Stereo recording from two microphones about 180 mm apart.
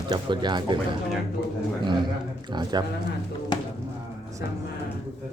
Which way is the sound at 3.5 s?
25° left (ahead or behind).